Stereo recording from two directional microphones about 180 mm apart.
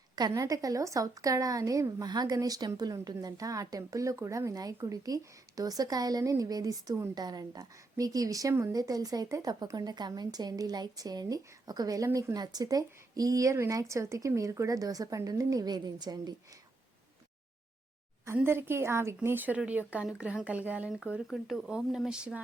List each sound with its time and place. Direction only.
0.2 s a woman's voice: 20° right (ahead or behind)
18.3 s a woman's voice: 15° right (ahead or behind)